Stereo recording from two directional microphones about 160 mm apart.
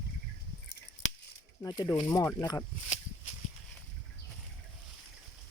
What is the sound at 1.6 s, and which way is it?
Speech, 20° left (ahead or behind).